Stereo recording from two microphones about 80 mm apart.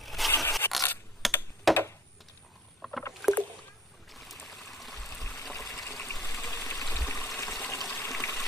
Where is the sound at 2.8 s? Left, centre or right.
Centre.